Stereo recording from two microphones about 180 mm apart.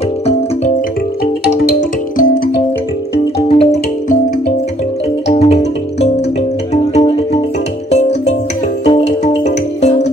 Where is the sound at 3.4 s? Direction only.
40° left (ahead or behind).